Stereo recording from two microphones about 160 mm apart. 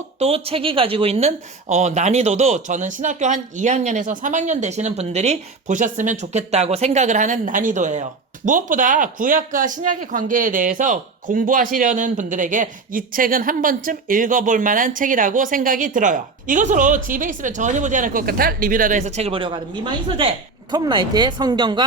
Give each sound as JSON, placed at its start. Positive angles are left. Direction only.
{"t": 0.2, "sound": "speech", "side_deg": -40}
{"t": 1.7, "sound": "speech", "side_deg": -45}